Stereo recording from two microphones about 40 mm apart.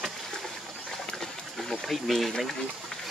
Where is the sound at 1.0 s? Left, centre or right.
Centre.